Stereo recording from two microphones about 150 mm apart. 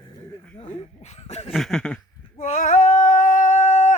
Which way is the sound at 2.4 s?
50° left (ahead or behind).